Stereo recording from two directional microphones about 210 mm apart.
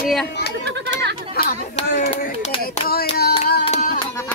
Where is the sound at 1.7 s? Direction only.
25° left (ahead or behind).